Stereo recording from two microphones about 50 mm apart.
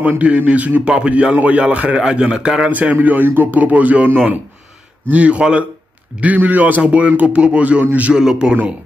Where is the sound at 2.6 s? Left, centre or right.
Right.